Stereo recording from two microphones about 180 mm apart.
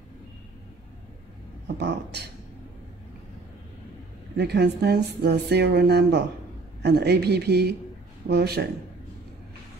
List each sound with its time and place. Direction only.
1.8 s speech: 70° right (ahead or behind)
4.4 s a man's voice: 65° right (ahead or behind)